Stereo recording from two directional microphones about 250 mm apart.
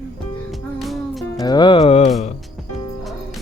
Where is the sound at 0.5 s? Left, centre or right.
Centre.